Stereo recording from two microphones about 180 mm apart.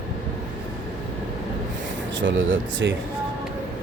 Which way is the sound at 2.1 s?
90° right.